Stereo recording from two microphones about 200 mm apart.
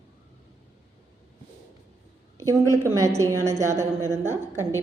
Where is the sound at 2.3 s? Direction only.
15° right (ahead or behind).